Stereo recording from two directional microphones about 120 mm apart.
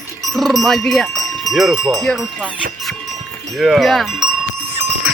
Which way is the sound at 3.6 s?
Centre (ahead or behind).